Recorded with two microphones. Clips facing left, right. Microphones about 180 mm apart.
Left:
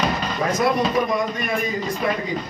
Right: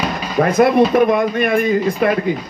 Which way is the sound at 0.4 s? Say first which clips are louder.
Right 9 dB; 60° right (ahead or behind).